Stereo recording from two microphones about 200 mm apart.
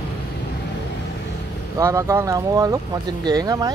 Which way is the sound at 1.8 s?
15° right (ahead or behind).